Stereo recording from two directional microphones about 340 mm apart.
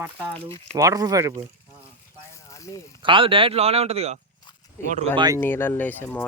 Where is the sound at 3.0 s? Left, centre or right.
Centre.